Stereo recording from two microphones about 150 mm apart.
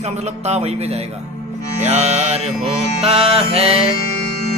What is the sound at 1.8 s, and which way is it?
Mantra, 50° right (ahead or behind).